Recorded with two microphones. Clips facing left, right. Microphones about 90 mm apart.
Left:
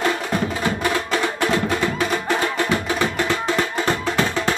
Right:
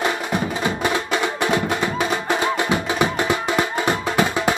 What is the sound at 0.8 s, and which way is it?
Music, 20° right (ahead or behind).